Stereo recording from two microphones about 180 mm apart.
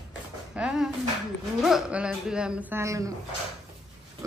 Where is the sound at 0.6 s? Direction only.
5° right (ahead or behind).